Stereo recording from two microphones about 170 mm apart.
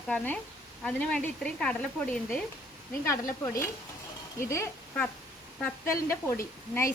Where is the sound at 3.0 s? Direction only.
20° left (ahead or behind).